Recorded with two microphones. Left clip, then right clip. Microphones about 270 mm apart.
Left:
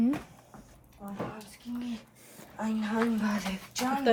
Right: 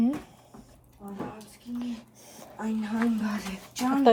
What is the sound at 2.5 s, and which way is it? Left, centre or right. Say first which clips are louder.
Speech: even; left.